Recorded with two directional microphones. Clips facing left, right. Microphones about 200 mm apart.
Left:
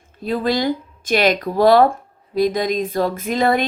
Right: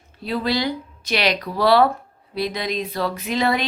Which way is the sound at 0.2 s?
45° left (ahead or behind).